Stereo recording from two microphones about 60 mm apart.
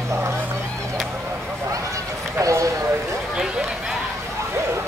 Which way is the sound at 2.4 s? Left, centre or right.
Right.